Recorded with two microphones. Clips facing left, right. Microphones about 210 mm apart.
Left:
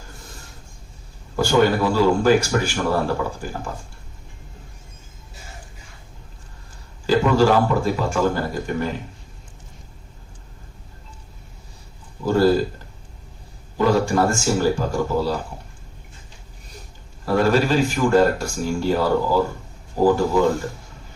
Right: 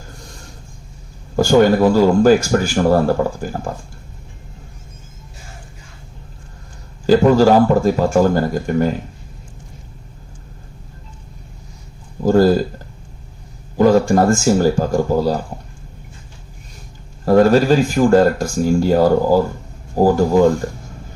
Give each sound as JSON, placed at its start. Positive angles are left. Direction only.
{"t": 1.4, "sound": "speech", "side_deg": -45}
{"t": 7.1, "sound": "a sound", "side_deg": -40}
{"t": 7.9, "sound": "speech", "side_deg": -40}
{"t": 12.2, "sound": "speech", "side_deg": -40}
{"t": 13.7, "sound": "speech", "side_deg": -40}
{"t": 17.2, "sound": "speech", "side_deg": -40}